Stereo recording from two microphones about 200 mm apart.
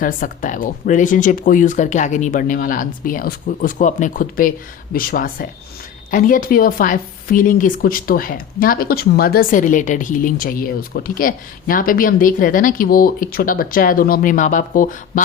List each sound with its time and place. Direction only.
0.0 s a woman's voice: 40° left (ahead or behind)